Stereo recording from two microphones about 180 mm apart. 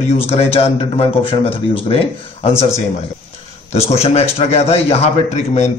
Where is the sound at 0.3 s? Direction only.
35° left (ahead or behind).